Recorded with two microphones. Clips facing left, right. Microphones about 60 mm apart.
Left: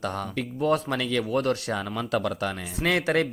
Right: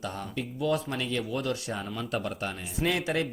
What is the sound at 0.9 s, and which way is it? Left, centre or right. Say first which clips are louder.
Speech: left 5 dB; left.